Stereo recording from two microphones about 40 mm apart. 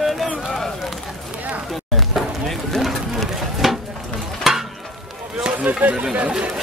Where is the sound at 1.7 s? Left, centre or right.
Centre.